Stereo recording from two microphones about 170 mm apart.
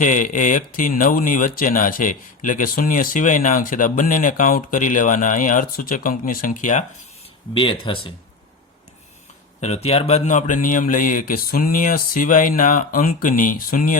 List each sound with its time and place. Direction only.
0.0 s speech: 50° left (ahead or behind)
7.5 s speech: 30° left (ahead or behind)
9.6 s speech: 40° left (ahead or behind); by 13.9 s 55° left (ahead or behind)